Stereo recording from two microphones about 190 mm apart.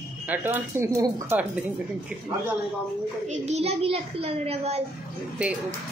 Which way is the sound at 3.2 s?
35° right (ahead or behind).